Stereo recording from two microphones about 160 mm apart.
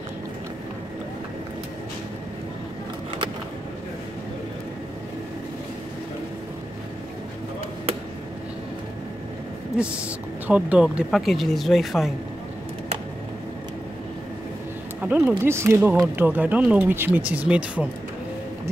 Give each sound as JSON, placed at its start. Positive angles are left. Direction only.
{"t": 9.8, "sound": "speech", "side_deg": -10}
{"t": 15.0, "sound": "speech", "side_deg": -10}